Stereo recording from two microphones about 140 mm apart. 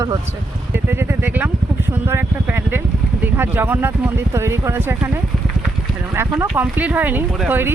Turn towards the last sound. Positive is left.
turn(degrees=-15)  # may be behind; listen again after turning